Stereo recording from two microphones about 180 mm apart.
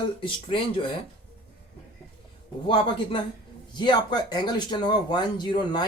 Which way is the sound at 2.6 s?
25° left (ahead or behind).